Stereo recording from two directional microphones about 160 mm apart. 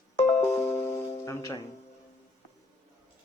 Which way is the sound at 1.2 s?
20° left (ahead or behind).